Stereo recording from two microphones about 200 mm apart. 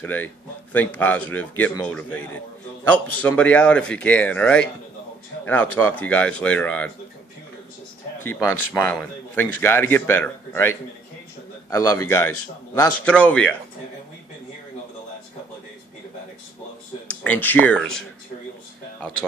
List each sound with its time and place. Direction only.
0.0 s a man's voice: 10° left (ahead or behind)
8.2 s a man's voice: 10° left (ahead or behind)
17.1 s speech: 5° left (ahead or behind)